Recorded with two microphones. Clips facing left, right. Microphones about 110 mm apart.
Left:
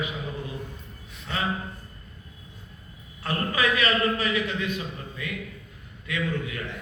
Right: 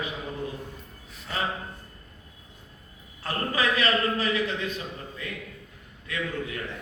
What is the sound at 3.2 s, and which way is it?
A man's voice, 35° right (ahead or behind).